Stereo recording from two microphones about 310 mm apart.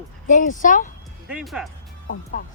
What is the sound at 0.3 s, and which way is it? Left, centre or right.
Speech, left.